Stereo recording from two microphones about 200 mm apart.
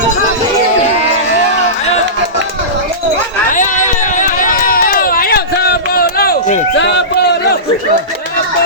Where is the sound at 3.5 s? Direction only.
40° left (ahead or behind); by 7.0 s 60° left (ahead or behind).